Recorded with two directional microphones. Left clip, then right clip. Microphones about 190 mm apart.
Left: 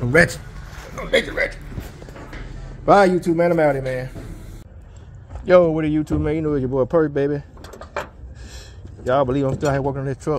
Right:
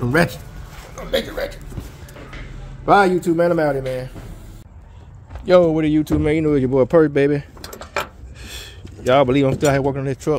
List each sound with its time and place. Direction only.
0.9 s a man's voice: 5° left (ahead or behind)
2.8 s a man's voice: 5° left (ahead or behind)
3.2 s speech: 10° right (ahead or behind)
5.4 s speech: 20° right (ahead or behind); by 10.3 s 40° right (ahead or behind)